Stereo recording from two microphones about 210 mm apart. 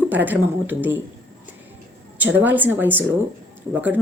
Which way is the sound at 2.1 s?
10° right (ahead or behind).